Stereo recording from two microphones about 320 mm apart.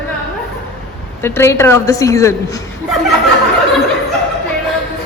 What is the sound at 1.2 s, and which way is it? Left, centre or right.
A woman's voice, centre.